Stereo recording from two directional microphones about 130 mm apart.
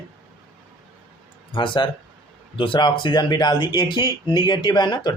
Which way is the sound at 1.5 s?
40° left (ahead or behind).